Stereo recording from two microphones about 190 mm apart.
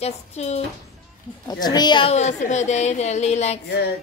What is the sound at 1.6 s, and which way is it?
A woman's voice, 20° left (ahead or behind).